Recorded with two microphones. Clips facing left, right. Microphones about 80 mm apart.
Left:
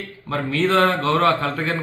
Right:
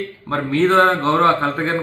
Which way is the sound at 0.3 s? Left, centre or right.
Right.